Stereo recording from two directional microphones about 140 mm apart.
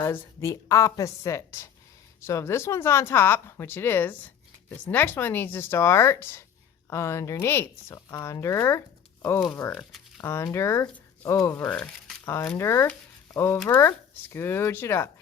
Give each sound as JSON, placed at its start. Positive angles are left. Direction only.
{"t": 0.0, "sound": "speech", "side_deg": 20}
{"t": 9.7, "sound": "speech", "side_deg": 5}
{"t": 10.2, "sound": "speech", "side_deg": 20}
{"t": 11.6, "sound": "speech", "side_deg": 5}
{"t": 12.2, "sound": "speech", "side_deg": 20}